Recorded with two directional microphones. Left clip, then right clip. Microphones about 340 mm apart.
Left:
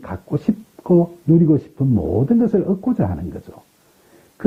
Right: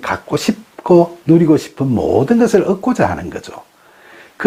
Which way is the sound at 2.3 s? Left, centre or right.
Centre.